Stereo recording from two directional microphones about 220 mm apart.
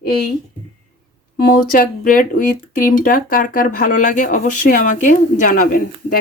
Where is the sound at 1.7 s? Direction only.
40° left (ahead or behind).